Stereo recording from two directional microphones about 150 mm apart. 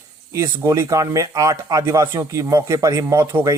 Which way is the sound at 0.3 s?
20° right (ahead or behind).